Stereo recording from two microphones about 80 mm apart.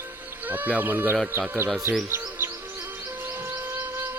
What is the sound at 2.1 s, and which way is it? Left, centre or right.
Music, right.